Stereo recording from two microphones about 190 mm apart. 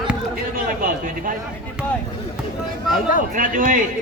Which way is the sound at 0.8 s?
45° right (ahead or behind).